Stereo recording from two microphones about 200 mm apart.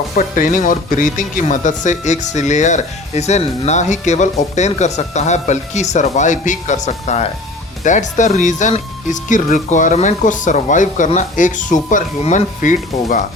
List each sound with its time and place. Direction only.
0.2 s speech: 40° left (ahead or behind)